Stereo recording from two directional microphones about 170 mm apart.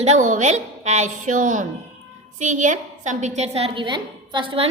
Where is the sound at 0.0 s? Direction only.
45° right (ahead or behind).